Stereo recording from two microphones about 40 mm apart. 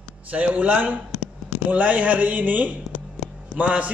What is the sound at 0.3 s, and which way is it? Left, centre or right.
A man's voice, right.